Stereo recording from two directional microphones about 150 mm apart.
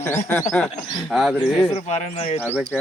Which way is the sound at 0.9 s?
Centre (ahead or behind).